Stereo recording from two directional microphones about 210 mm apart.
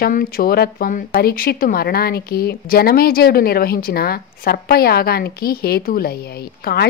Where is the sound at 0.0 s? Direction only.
45° left (ahead or behind).